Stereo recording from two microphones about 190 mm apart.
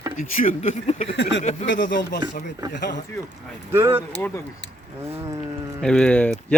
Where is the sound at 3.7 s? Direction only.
10° right (ahead or behind).